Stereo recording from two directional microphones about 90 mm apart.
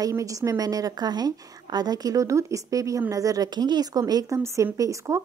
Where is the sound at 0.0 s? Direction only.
40° right (ahead or behind).